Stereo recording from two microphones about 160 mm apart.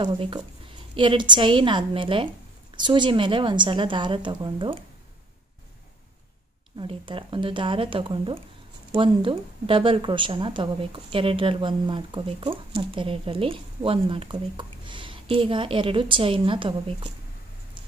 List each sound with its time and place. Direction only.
0.0 s speech: 30° right (ahead or behind)
6.8 s speech: 30° right (ahead or behind)